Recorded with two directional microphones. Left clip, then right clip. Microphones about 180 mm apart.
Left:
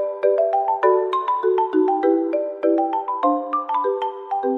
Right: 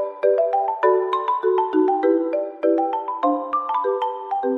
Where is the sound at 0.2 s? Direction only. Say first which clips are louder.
Even; centre (ahead or behind).